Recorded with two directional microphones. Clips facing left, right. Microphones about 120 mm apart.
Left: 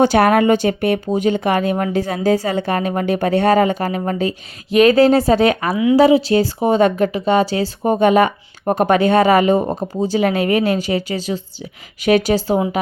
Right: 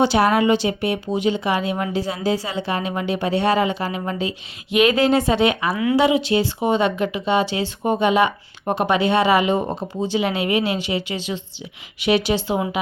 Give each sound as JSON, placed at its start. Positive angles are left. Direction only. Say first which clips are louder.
{"t": 0.0, "sound": "speech", "louder": "left 4 dB", "side_deg": 55}